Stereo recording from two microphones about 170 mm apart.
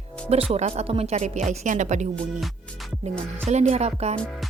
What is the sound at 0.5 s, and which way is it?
Speech, 40° right (ahead or behind).